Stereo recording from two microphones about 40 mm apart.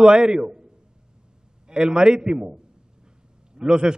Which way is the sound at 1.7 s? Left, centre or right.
Centre.